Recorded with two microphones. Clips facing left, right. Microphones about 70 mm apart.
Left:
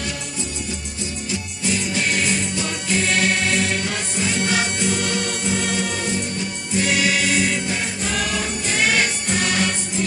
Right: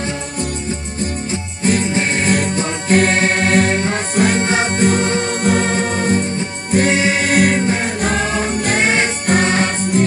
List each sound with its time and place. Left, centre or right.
1.3 s music: right
7.3 s music: right
8.6 s jingle bell: right
9.3 s music: right